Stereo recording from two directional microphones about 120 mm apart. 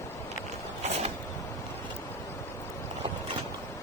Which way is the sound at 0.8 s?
65° right (ahead or behind).